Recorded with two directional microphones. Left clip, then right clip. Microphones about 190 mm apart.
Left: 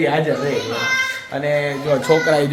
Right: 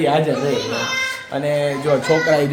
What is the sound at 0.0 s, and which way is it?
A child's voice, 10° right (ahead or behind).